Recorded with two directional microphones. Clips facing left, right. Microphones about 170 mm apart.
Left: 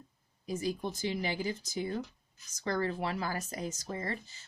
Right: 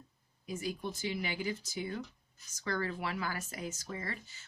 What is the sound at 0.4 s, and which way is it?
A woman's voice, 40° left (ahead or behind).